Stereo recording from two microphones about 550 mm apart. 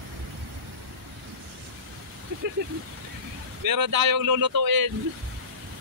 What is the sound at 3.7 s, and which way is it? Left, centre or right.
Speech, right.